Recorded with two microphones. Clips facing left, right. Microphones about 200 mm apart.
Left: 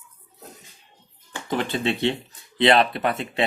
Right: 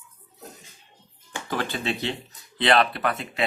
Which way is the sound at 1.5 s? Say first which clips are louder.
Left 4 dB; 25° left (ahead or behind).